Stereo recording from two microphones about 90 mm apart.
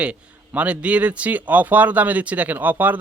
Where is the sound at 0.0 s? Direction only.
15° right (ahead or behind).